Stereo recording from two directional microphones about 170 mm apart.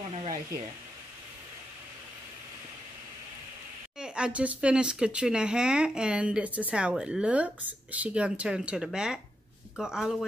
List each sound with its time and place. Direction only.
4.0 s speech: 5° right (ahead or behind)